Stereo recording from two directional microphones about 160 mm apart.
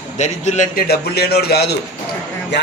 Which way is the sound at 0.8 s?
85° left.